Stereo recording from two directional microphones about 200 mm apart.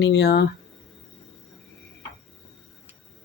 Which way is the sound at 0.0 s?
60° left (ahead or behind).